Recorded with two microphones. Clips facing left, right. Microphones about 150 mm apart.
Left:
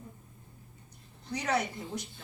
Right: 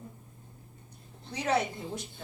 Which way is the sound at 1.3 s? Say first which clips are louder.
Right 2 dB; 25° right (ahead or behind).